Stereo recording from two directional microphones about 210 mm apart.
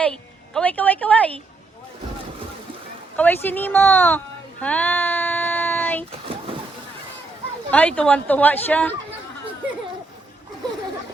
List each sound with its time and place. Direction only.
0.0 s a woman's voice: 5° left (ahead or behind)
3.2 s speech: 10° left (ahead or behind)
4.6 s child singing: 5° left (ahead or behind)
6.1 s vehicle: 25° right (ahead or behind)
7.7 s speech: 5° left (ahead or behind)